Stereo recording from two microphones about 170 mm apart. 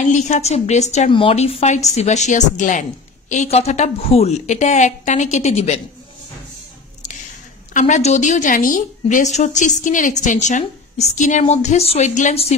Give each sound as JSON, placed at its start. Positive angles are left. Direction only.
{"t": 0.0, "sound": "a woman's voice", "side_deg": 45}
{"t": 7.7, "sound": "a woman's voice", "side_deg": 45}